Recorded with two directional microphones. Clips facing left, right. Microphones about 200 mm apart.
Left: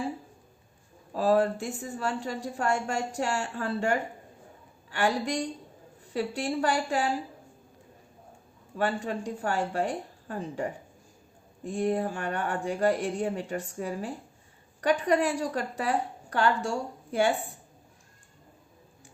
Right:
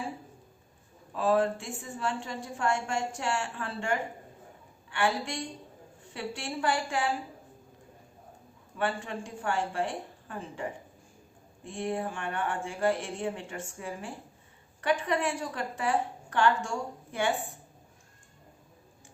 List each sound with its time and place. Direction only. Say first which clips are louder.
1.1 s a woman's voice: left 2 dB; 40° left (ahead or behind)
8.8 s a woman's voice: left 3 dB; 40° left (ahead or behind)